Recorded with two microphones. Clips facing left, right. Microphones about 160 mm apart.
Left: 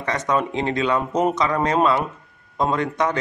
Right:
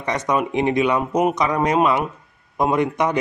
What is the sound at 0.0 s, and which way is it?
Speech, 15° right (ahead or behind).